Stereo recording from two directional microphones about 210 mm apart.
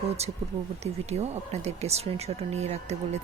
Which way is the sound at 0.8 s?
30° right (ahead or behind).